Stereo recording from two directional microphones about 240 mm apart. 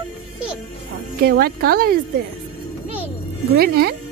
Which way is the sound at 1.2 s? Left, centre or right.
Right.